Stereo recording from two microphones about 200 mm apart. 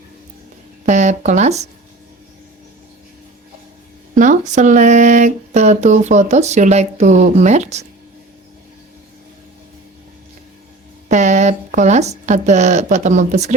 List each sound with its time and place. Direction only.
0.9 s speech: 35° right (ahead or behind)
4.1 s speech: 40° right (ahead or behind)
11.1 s speech: 35° right (ahead or behind)